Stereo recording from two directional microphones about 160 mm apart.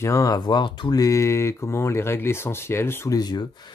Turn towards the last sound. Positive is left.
turn(degrees=25)  # may be behind; listen again after turning